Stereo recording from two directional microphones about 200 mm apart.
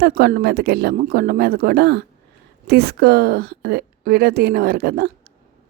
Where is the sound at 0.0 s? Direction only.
50° right (ahead or behind).